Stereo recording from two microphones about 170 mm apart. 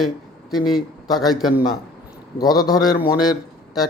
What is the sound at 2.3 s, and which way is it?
Speech, 20° left (ahead or behind).